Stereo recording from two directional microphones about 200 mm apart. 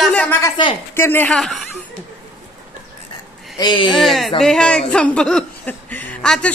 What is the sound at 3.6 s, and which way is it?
Speech, 20° left (ahead or behind).